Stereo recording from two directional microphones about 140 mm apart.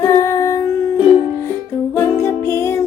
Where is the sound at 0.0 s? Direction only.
25° left (ahead or behind).